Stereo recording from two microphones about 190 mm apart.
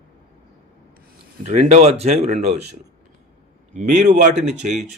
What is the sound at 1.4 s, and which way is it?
A man's voice, 35° right (ahead or behind).